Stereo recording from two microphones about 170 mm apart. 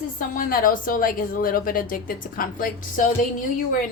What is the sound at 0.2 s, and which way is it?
A woman's voice, 55° left (ahead or behind).